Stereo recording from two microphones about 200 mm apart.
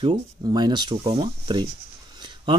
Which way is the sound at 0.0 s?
25° right (ahead or behind).